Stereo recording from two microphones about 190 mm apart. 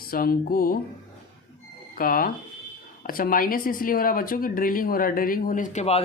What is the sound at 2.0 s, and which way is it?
Speech, 50° left (ahead or behind).